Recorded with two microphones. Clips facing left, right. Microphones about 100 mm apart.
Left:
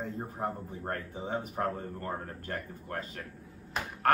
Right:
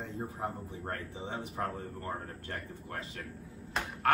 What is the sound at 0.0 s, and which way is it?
Speech, 40° left (ahead or behind).